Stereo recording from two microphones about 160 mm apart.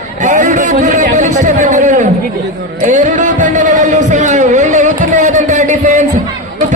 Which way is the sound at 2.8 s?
50° right (ahead or behind).